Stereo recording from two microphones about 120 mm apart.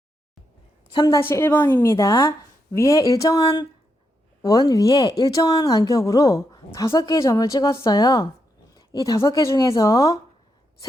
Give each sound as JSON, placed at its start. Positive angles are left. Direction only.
{"t": 1.0, "sound": "speech", "side_deg": 20}
{"t": 3.4, "sound": "speech", "side_deg": 40}
{"t": 4.4, "sound": "speech", "side_deg": 30}
{"t": 6.9, "sound": "speech", "side_deg": 40}
{"t": 7.2, "sound": "speech", "side_deg": 30}
{"t": 8.7, "sound": "a sound", "side_deg": 30}
{"t": 9.2, "sound": "speech", "side_deg": 25}